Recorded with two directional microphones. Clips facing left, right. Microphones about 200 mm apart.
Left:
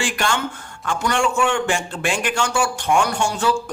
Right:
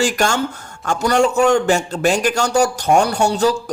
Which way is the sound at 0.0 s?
40° right (ahead or behind).